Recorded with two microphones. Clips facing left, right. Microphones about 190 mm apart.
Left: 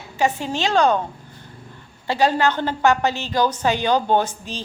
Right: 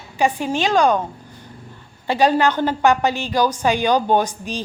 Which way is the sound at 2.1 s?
15° right (ahead or behind).